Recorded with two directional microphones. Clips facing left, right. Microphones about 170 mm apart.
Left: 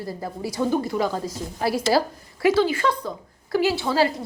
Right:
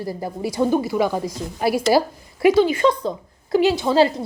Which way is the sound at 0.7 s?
10° right (ahead or behind).